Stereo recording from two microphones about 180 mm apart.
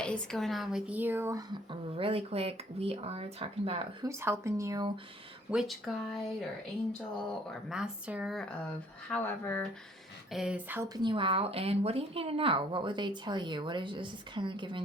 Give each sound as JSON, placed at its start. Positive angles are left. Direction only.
{"t": 0.0, "sound": "speech", "side_deg": 5}
{"t": 2.0, "sound": "speech", "side_deg": -30}
{"t": 4.0, "sound": "speech", "side_deg": -15}
{"t": 5.5, "sound": "speech", "side_deg": 0}
{"t": 7.7, "sound": "speech", "side_deg": -5}
{"t": 10.3, "sound": "speech", "side_deg": -5}
{"t": 10.8, "sound": "a woman's voice", "side_deg": -25}